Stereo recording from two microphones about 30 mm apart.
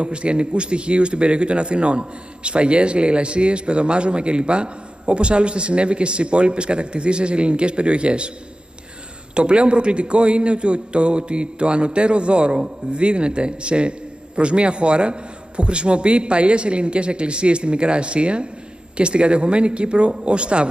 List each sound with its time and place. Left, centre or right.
0.0 s a man's voice: right
9.3 s a man's voice: right